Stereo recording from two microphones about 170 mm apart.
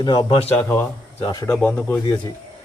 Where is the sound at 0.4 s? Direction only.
10° left (ahead or behind).